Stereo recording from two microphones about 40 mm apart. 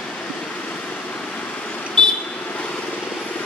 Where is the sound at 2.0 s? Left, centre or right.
Left.